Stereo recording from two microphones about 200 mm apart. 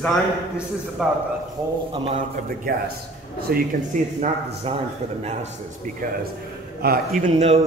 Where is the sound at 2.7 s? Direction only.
45° right (ahead or behind).